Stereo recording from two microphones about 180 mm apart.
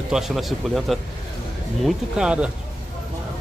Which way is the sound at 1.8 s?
5° right (ahead or behind).